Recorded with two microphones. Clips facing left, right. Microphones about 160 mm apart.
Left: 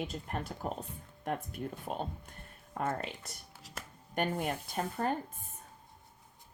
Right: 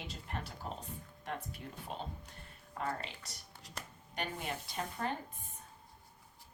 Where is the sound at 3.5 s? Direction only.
5° left (ahead or behind).